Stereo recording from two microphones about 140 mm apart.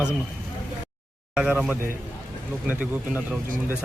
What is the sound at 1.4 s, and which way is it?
Speech, 10° right (ahead or behind).